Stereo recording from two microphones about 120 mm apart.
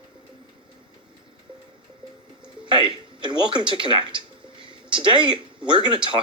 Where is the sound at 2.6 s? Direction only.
45° right (ahead or behind).